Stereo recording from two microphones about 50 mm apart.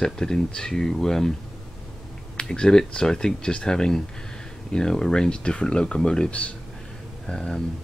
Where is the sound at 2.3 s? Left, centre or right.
Centre.